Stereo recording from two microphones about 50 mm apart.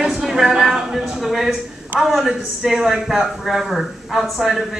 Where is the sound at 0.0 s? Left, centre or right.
Centre.